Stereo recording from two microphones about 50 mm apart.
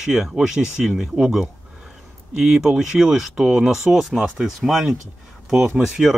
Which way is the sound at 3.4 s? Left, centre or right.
Centre.